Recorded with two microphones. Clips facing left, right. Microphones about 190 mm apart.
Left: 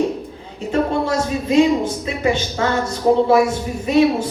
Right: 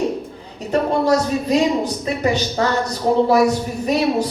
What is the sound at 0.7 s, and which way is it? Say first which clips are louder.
A woman's voice: right 2 dB; 40° right (ahead or behind).